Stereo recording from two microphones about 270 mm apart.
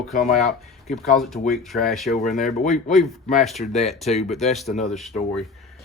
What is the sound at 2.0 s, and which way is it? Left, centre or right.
Speech, left.